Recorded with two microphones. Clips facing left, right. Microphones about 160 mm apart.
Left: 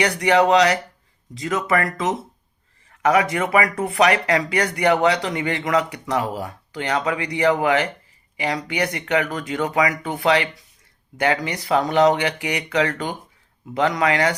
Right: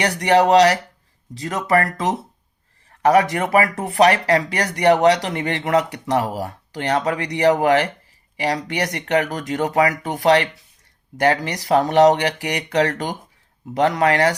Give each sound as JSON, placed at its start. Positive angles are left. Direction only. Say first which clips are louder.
{"t": 0.0, "sound": "speech", "louder": "right 1 dB", "side_deg": -35}
{"t": 3.0, "sound": "speech", "louder": "right 3 dB", "side_deg": -35}